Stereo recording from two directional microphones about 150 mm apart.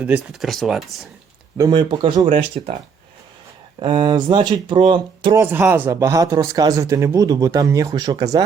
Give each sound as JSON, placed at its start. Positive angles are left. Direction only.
{"t": 0.0, "sound": "speech", "side_deg": -10}
{"t": 1.5, "sound": "speech", "side_deg": -30}
{"t": 2.5, "sound": "speech", "side_deg": -50}
{"t": 3.8, "sound": "speech", "side_deg": -30}
{"t": 5.4, "sound": "speech", "side_deg": -15}